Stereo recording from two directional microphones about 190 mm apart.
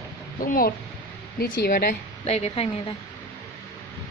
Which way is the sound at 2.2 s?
35° left (ahead or behind).